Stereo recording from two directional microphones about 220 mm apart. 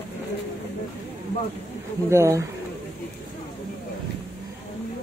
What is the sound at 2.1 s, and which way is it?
Speech, 15° right (ahead or behind).